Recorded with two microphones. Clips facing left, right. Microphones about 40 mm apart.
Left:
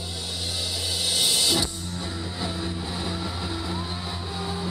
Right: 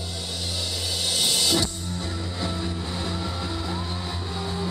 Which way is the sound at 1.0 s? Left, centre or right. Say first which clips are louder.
Even; centre.